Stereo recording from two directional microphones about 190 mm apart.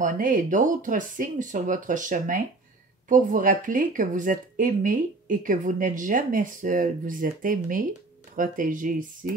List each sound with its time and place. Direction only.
0.0 s speech: 45° right (ahead or behind)